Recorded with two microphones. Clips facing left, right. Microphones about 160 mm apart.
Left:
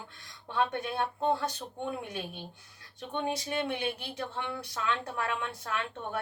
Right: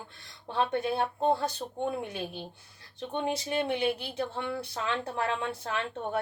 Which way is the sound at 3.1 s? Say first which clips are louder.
Right 2 dB; 30° right (ahead or behind).